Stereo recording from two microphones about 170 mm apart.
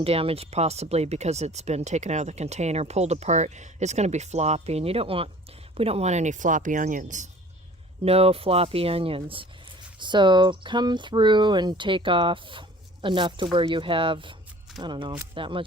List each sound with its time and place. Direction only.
0.0 s speech: 35° right (ahead or behind)
8.0 s speech: 35° right (ahead or behind)